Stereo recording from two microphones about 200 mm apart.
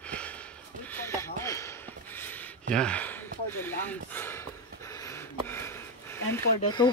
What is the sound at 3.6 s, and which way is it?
Gasp, 10° left (ahead or behind).